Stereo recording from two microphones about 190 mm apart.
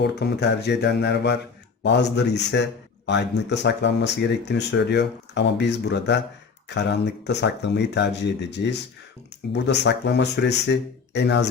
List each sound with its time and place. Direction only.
0.0 s speech: 60° left (ahead or behind)